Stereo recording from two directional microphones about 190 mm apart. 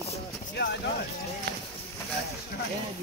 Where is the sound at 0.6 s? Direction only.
65° left (ahead or behind).